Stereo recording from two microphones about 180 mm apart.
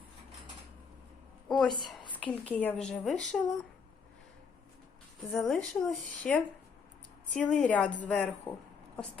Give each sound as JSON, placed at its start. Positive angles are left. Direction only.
{"t": 1.5, "sound": "a sound", "side_deg": 0}
{"t": 1.8, "sound": "a woman's voice", "side_deg": 5}
{"t": 5.3, "sound": "a woman's voice", "side_deg": 0}